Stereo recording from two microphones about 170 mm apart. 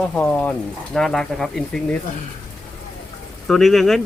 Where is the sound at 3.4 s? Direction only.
Centre (ahead or behind).